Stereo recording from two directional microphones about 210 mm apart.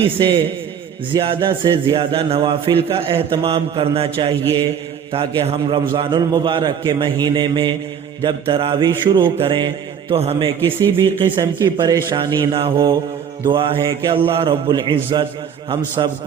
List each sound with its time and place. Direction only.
0.0 s speech: 25° right (ahead or behind)